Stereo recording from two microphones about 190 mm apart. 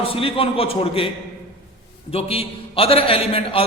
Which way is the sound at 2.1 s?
30° left (ahead or behind).